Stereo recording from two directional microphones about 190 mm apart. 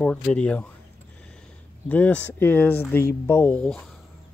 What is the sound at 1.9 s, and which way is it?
Speech, 10° left (ahead or behind).